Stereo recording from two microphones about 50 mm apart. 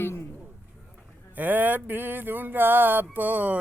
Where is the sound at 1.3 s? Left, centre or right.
Right.